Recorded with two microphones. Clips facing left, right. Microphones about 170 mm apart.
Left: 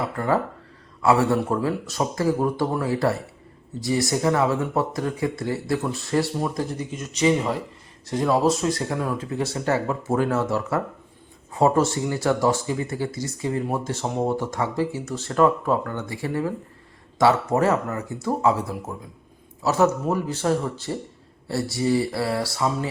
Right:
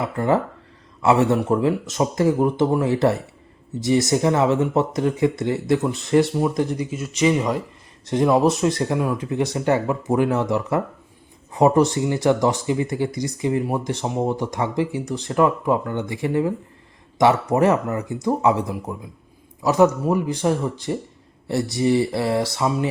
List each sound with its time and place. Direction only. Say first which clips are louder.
1.0 s speech: right 2 dB; 20° right (ahead or behind)
8.0 s speech: right 3 dB; 20° right (ahead or behind)